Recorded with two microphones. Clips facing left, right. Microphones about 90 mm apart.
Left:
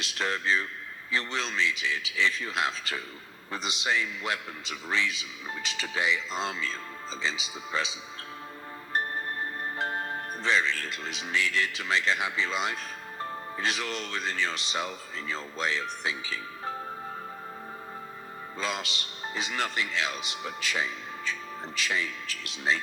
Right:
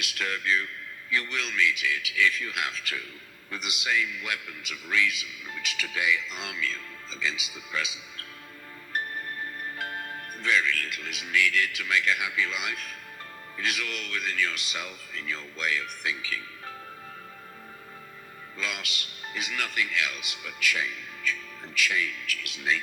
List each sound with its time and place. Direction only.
0.0 s a man's voice: 30° left (ahead or behind)
18.5 s a man's voice: 30° left (ahead or behind)